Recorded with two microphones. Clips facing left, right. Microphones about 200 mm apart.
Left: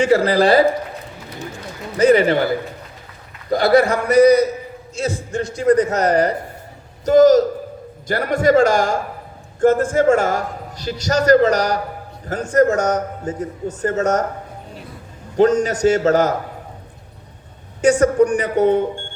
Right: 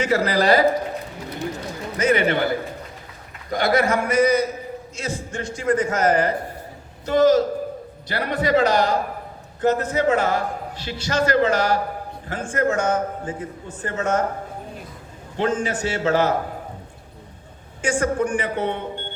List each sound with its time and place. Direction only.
0.0 s a man's voice: 30° left (ahead or behind)
2.0 s a man's voice: 35° left (ahead or behind)
3.5 s a man's voice: 35° left (ahead or behind)
15.4 s a man's voice: 40° left (ahead or behind)
17.8 s a man's voice: 40° left (ahead or behind)